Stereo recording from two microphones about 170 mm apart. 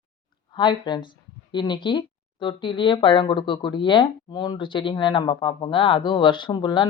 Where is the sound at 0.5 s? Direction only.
25° left (ahead or behind).